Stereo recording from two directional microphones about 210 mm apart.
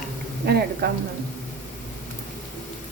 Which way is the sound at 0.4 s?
50° right (ahead or behind).